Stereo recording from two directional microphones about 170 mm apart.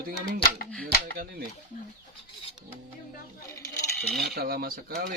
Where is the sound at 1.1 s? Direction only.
65° right (ahead or behind).